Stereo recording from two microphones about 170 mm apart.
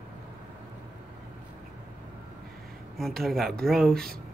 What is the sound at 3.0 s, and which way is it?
Speech, centre (ahead or behind).